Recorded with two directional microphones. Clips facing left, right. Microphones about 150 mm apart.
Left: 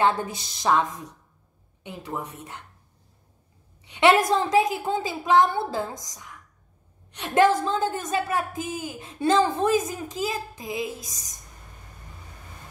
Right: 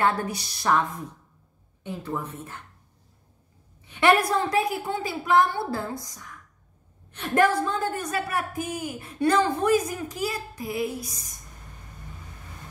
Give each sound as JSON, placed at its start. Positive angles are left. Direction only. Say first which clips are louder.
{"t": 0.0, "sound": "a woman's voice", "louder": "left 1 dB", "side_deg": 20}
{"t": 3.8, "sound": "a woman's voice", "louder": "left 2 dB", "side_deg": 15}